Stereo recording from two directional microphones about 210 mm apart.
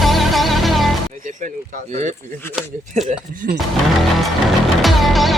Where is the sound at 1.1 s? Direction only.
40° right (ahead or behind).